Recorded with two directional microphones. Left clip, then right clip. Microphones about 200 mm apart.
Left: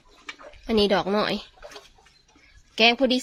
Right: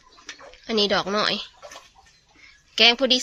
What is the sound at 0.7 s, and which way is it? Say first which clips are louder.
Speech: even; 20° left (ahead or behind).